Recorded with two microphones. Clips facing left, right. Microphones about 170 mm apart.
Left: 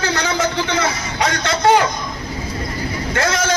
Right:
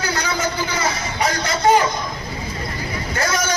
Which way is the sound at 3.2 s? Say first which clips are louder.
Left 3 dB; 90° left.